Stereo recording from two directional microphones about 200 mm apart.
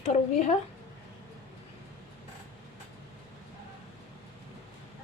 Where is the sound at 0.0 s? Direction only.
35° left (ahead or behind).